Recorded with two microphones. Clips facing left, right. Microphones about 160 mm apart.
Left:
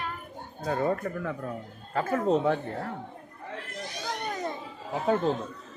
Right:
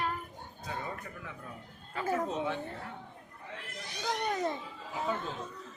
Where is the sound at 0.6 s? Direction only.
55° left (ahead or behind).